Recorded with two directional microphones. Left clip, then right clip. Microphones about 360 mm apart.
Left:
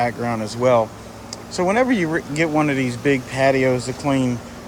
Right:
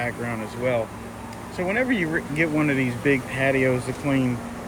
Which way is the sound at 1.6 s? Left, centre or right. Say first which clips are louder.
Left 6 dB; left.